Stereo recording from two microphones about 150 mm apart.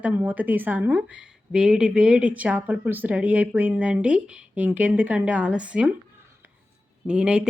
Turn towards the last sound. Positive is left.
turn(degrees=-5)  # may be behind; listen again after turning